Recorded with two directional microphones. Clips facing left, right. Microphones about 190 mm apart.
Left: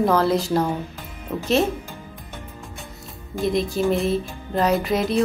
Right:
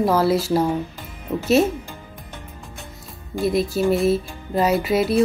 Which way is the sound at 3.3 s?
5° right (ahead or behind).